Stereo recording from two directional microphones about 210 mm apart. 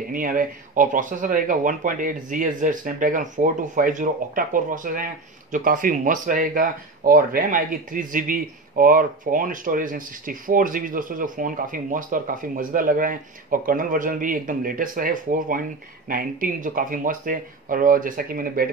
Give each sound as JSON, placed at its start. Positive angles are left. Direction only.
{"t": 0.1, "sound": "speech", "side_deg": -40}